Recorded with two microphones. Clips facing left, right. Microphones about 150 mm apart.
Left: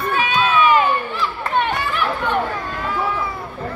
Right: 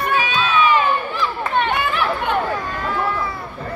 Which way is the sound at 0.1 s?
50° left (ahead or behind).